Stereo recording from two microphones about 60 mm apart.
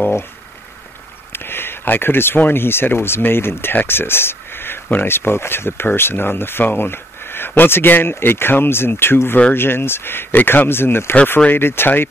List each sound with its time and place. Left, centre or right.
1.3 s speech: left